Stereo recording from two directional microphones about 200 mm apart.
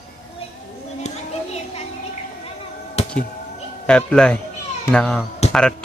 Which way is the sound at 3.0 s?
30° left (ahead or behind).